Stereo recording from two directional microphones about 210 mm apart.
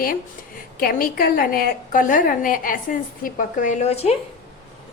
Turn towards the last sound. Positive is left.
turn(degrees=30)  # may be behind; listen again after turning